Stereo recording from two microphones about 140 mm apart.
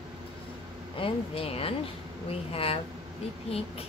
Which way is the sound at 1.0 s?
45° left (ahead or behind).